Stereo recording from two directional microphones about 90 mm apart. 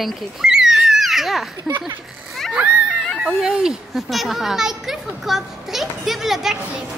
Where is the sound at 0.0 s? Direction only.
5° right (ahead or behind).